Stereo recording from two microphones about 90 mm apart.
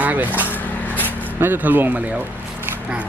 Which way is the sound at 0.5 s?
20° left (ahead or behind).